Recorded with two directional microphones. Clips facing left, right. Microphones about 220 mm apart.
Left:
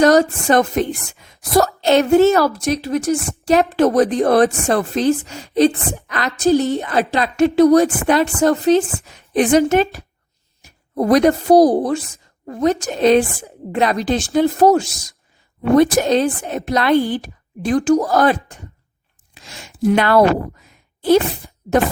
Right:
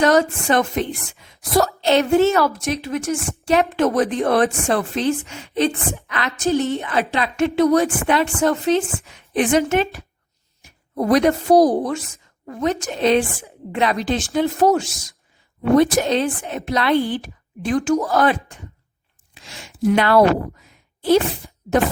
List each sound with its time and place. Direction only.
0.0 s a woman's voice: 40° left (ahead or behind)
19.3 s a sound: 45° left (ahead or behind)
21.7 s a woman's voice: 40° left (ahead or behind)